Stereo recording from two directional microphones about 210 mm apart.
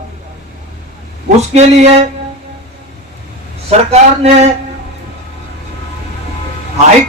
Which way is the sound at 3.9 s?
30° right (ahead or behind).